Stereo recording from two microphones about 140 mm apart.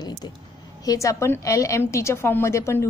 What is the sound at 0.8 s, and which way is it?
A woman's voice, 20° left (ahead or behind).